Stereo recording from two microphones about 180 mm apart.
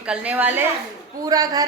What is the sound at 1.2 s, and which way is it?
Speech, 20° right (ahead or behind).